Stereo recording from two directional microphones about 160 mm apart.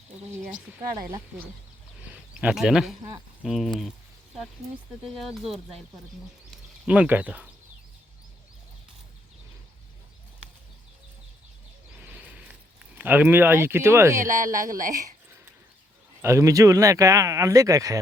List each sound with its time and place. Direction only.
2.0 s speech: 10° right (ahead or behind)
5.0 s speech: centre (ahead or behind)
6.8 s speech: 5° right (ahead or behind)
12.0 s a sound: 10° right (ahead or behind)
13.0 s speech: 10° right (ahead or behind)
14.2 s speech: 55° right (ahead or behind)
16.2 s speech: 20° right (ahead or behind)